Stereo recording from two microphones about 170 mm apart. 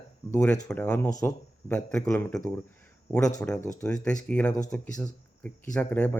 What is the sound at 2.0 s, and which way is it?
Speech, 20° left (ahead or behind).